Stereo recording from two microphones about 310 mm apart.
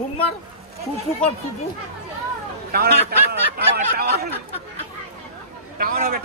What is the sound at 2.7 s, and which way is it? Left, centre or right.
Speech, right.